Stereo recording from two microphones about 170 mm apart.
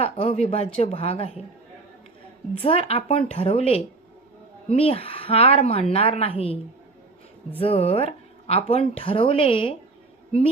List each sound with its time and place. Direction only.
0.0 s a sound: 35° left (ahead or behind)
0.8 s speech: 35° left (ahead or behind)
2.5 s speech: 35° left (ahead or behind)
7.6 s speech: 35° left (ahead or behind)